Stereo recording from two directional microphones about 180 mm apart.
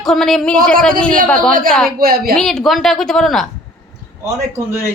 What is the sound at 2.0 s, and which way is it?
Speech, 55° right (ahead or behind).